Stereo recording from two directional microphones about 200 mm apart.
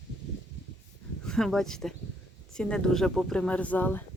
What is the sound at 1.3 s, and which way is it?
Speech, centre (ahead or behind).